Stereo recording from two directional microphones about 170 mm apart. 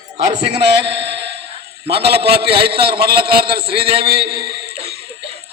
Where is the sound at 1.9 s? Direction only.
70° right (ahead or behind).